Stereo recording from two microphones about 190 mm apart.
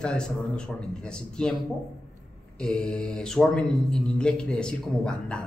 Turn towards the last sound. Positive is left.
turn(degrees=5)  # may be behind; listen again after turning